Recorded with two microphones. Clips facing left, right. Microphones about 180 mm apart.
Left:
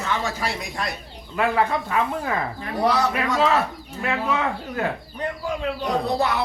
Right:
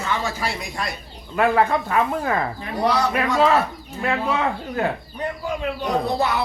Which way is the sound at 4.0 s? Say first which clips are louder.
Right 2 dB; 35° right (ahead or behind).